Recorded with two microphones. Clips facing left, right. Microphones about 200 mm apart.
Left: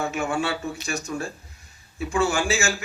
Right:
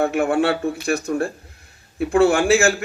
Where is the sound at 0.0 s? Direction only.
60° right (ahead or behind).